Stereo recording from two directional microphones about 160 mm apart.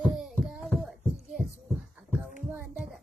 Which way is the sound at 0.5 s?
Centre (ahead or behind).